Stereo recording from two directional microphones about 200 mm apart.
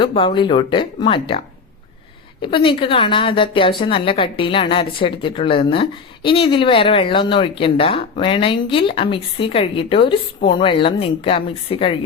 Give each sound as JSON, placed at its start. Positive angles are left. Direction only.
{"t": 0.0, "sound": "a woman's voice", "side_deg": 25}
{"t": 2.4, "sound": "a woman's voice", "side_deg": 25}